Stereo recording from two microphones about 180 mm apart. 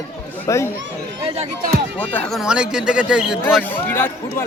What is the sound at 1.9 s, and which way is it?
Speech, 10° left (ahead or behind).